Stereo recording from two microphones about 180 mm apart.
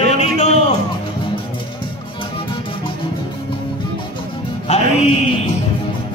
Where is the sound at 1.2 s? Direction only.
30° left (ahead or behind).